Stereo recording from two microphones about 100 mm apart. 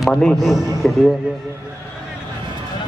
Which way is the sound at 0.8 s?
10° left (ahead or behind).